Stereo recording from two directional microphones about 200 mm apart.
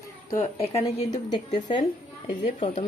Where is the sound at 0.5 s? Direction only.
30° left (ahead or behind).